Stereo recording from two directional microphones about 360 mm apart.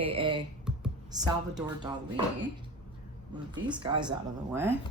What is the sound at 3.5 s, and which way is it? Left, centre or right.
Speech, centre.